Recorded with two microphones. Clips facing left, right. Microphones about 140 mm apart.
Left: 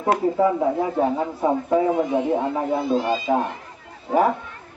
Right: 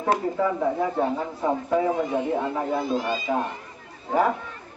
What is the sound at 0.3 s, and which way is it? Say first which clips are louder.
A man's voice: left 4 dB; 20° left (ahead or behind).